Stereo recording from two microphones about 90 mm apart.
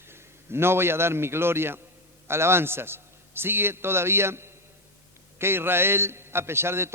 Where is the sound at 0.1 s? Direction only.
25° right (ahead or behind).